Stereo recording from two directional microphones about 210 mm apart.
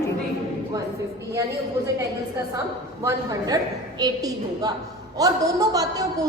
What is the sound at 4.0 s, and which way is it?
A woman's voice, 20° right (ahead or behind).